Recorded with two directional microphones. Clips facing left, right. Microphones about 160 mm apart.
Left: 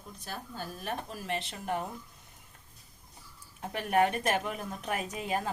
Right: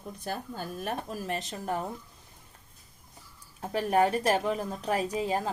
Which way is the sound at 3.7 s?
35° right (ahead or behind).